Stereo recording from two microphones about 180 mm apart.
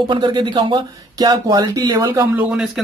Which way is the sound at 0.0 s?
25° right (ahead or behind).